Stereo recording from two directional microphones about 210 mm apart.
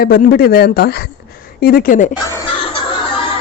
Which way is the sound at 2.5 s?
25° left (ahead or behind).